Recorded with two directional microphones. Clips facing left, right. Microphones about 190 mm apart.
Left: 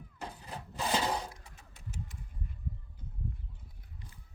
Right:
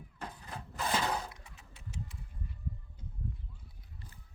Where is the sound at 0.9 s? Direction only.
15° left (ahead or behind).